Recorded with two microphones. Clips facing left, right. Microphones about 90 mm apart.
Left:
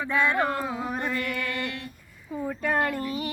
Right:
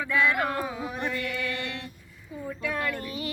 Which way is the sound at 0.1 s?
30° left (ahead or behind).